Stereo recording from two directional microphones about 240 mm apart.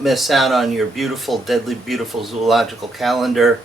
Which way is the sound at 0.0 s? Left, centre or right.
Centre.